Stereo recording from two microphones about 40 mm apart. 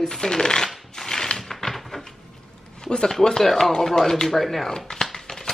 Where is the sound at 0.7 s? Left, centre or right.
Centre.